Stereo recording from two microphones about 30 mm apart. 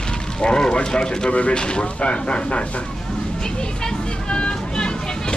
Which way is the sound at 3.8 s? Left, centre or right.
Left.